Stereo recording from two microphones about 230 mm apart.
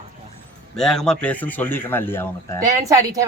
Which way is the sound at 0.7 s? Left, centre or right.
Centre.